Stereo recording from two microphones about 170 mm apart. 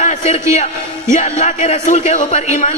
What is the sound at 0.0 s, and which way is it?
A man's voice, 45° left (ahead or behind).